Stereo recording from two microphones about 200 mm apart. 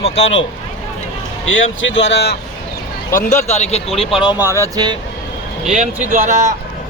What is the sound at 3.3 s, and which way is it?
Speech, 35° left (ahead or behind).